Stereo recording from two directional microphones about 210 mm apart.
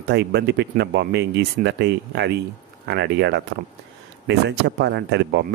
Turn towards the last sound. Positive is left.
turn(degrees=-55)  # may be behind; listen again after turning